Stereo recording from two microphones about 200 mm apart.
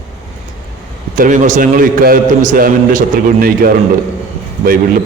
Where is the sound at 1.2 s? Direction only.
40° right (ahead or behind).